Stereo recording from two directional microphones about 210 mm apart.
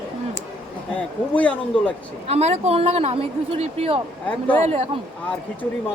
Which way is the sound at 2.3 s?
30° right (ahead or behind).